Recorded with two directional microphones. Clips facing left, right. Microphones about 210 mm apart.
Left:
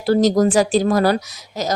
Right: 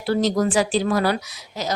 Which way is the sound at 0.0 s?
40° left (ahead or behind).